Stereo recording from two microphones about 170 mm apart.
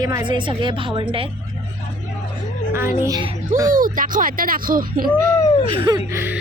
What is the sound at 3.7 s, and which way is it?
Speech, 50° right (ahead or behind).